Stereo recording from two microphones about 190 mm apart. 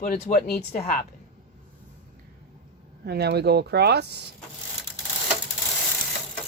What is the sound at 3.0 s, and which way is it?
A woman's voice, 60° right (ahead or behind).